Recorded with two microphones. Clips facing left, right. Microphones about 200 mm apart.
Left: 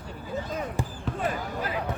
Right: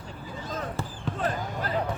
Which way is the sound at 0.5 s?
10° left (ahead or behind).